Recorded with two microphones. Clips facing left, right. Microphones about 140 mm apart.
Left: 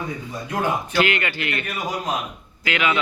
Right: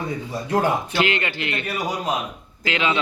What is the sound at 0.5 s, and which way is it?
Speech, 25° right (ahead or behind).